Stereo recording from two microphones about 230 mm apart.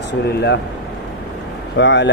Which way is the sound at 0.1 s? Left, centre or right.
Left.